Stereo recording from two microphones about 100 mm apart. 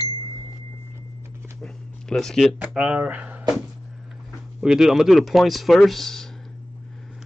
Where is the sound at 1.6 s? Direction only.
5° left (ahead or behind).